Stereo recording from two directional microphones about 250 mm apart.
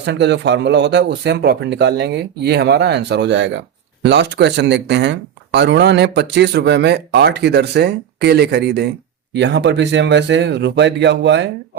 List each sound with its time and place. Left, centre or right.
0.0 s speech: right